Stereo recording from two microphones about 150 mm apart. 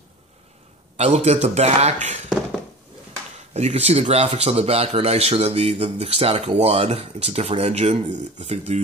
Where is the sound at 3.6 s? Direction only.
45° right (ahead or behind).